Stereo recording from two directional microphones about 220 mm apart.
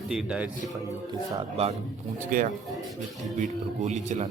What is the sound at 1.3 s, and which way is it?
Speech, 30° right (ahead or behind).